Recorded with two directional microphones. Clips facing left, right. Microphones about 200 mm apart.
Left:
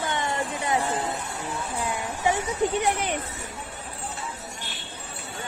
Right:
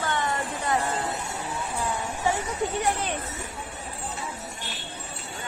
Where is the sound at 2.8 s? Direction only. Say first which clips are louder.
Left 1 dB; 15° left (ahead or behind).